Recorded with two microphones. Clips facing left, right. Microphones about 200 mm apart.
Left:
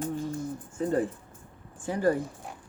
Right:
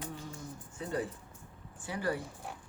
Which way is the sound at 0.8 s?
45° left (ahead or behind).